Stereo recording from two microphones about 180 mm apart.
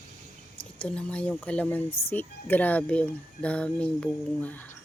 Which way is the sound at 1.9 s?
35° left (ahead or behind).